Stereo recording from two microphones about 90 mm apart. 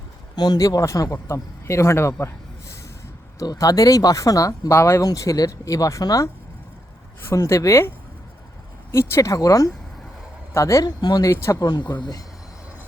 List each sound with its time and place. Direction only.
0.3 s speech: 50° left (ahead or behind); by 2.1 s 30° left (ahead or behind)
3.3 s speech: 40° left (ahead or behind)
4.7 s speech: 30° left (ahead or behind)
10.8 s speech: 50° left (ahead or behind)
11.3 s speech: 30° left (ahead or behind)
11.6 s speech: 50° left (ahead or behind)